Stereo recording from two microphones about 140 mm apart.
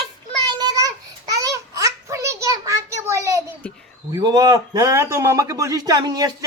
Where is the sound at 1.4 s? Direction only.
25° right (ahead or behind).